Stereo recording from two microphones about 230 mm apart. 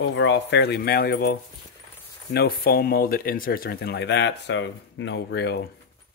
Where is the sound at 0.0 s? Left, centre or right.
Left.